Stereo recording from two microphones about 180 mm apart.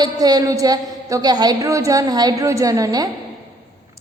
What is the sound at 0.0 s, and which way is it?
A woman's voice, 20° right (ahead or behind).